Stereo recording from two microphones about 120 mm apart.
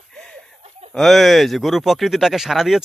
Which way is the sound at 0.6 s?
60° right (ahead or behind).